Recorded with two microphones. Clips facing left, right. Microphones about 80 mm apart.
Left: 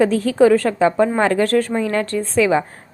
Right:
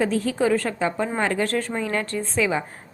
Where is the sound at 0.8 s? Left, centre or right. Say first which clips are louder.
Left 8 dB; left.